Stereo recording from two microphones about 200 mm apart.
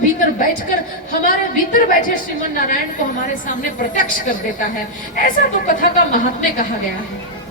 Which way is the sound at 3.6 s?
45° left (ahead or behind).